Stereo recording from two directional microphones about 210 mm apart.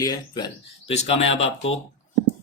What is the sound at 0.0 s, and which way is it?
Speech, 20° left (ahead or behind).